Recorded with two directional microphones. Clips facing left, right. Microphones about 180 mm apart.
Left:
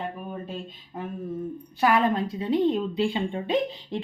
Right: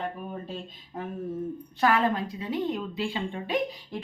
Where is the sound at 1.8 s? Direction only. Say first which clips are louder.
Left 2 dB; 15° left (ahead or behind).